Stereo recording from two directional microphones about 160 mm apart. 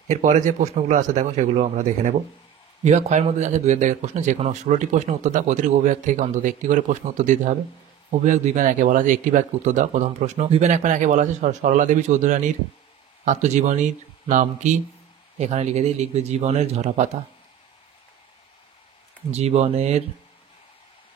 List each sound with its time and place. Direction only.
0.1 s speech: 50° right (ahead or behind)
19.3 s speech: 40° right (ahead or behind)